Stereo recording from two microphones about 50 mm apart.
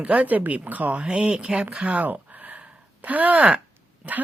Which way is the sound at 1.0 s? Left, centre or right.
Centre.